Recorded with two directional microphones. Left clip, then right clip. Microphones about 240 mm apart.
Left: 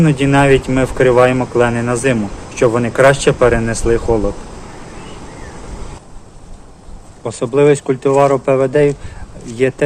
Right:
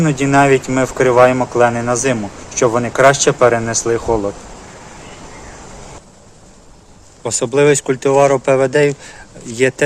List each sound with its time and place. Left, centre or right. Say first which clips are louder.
0.0 s speech: even; centre
7.3 s speech: left 1 dB; right